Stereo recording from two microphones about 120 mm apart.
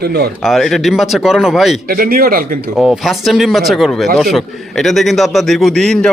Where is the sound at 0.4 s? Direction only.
Centre (ahead or behind).